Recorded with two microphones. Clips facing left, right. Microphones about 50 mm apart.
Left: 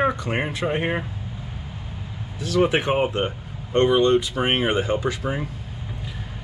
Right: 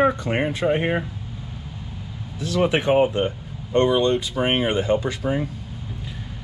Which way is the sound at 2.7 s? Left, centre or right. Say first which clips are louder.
Right 3 dB; left.